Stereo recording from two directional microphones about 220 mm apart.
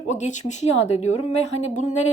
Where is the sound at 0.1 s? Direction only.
35° left (ahead or behind).